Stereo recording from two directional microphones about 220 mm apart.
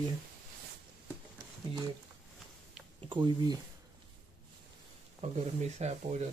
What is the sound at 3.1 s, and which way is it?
Speech, 20° right (ahead or behind).